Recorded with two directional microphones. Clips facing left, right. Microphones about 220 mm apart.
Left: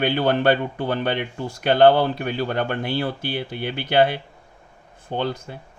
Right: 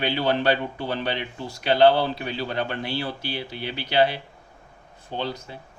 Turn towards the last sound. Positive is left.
turn(degrees=50)  # may be behind; listen again after turning